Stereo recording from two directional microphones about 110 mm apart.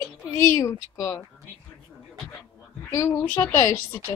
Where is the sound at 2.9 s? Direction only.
30° left (ahead or behind).